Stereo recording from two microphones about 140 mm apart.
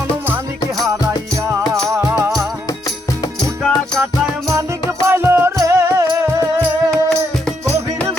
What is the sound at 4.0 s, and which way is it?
Music, 20° right (ahead or behind).